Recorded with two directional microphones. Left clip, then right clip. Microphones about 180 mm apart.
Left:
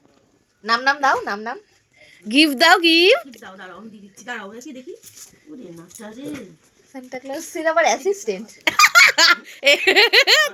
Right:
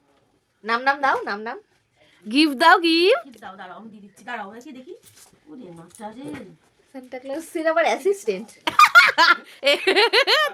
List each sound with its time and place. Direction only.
0.6 s speech: centre (ahead or behind)
2.0 s speech: 10° right (ahead or behind)
5.5 s speech: 25° right (ahead or behind)
6.9 s speech: 20° right (ahead or behind)